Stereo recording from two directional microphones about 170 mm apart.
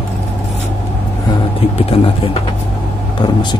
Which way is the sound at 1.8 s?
35° left (ahead or behind).